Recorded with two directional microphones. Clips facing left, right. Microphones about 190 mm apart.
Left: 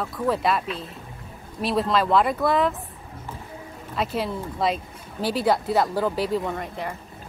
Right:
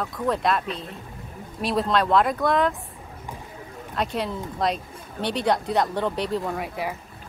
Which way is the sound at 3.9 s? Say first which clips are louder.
Left 1 dB; centre (ahead or behind).